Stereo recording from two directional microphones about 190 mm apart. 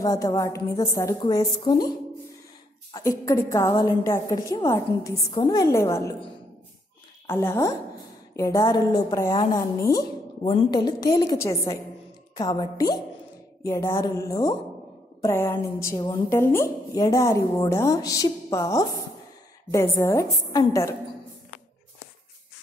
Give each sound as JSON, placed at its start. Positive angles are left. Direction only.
{"t": 0.0, "sound": "a woman's voice", "side_deg": 15}
{"t": 2.9, "sound": "a woman's voice", "side_deg": 15}
{"t": 7.2, "sound": "a woman's voice", "side_deg": 15}